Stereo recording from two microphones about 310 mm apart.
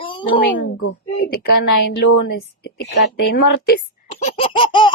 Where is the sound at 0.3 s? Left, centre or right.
Left.